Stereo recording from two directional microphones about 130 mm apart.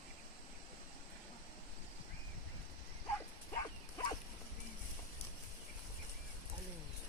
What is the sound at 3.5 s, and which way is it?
Bow-wow, 25° left (ahead or behind).